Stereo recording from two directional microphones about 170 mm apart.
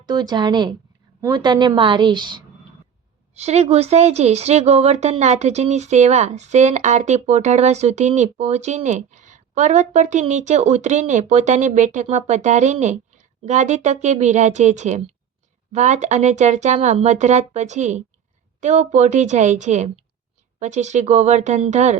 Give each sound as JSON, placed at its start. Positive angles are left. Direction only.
{"t": 0.0, "sound": "a woman's voice", "side_deg": -25}
{"t": 3.3, "sound": "a woman's voice", "side_deg": -40}